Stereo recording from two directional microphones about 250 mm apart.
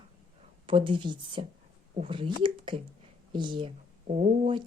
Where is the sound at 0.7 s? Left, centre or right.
Centre.